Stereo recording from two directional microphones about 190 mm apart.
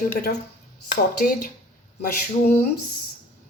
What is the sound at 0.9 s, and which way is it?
Speech, 50° left (ahead or behind).